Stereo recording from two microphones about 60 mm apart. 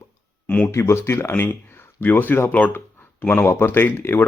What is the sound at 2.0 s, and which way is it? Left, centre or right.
Speech, left.